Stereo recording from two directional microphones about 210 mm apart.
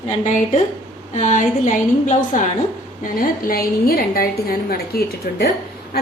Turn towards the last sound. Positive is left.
turn(degrees=50)  # may be behind; listen again after turning